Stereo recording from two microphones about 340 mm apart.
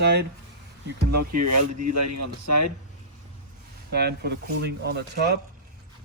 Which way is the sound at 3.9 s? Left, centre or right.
Right.